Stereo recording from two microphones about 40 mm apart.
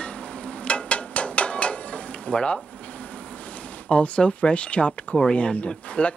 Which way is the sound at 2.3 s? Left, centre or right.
Centre.